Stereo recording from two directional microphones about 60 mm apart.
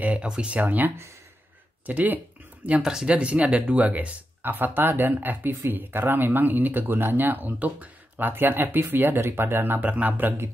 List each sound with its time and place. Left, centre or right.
0.0 s speech: right
2.8 s speech: centre
3.1 s speech: centre
4.4 s speech: right